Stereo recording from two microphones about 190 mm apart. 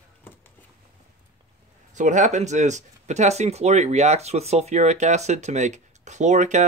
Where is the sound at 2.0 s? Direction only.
40° right (ahead or behind).